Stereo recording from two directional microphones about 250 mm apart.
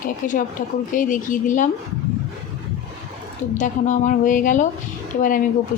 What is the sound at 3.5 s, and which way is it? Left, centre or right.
A woman's voice, left.